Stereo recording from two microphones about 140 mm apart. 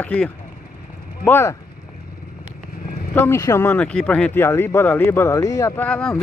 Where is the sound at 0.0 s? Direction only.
10° left (ahead or behind).